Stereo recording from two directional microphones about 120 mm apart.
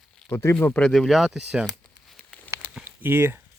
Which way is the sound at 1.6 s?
5° left (ahead or behind).